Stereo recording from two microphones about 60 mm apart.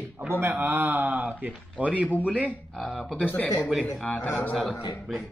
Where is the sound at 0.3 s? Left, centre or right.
Right.